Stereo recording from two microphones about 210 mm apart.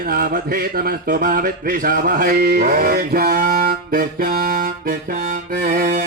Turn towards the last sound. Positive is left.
turn(degrees=-45)  # may be behind; listen again after turning